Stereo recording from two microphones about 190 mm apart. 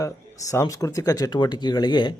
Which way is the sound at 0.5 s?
20° left (ahead or behind).